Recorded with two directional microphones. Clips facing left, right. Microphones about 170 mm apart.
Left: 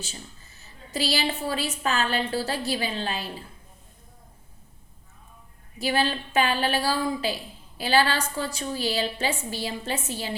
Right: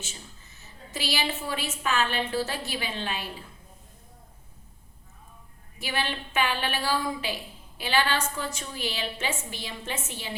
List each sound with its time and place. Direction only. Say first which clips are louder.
0.9 s a woman's voice: left 4 dB; 35° left (ahead or behind)
5.8 s a woman's voice: left 6 dB; 35° left (ahead or behind)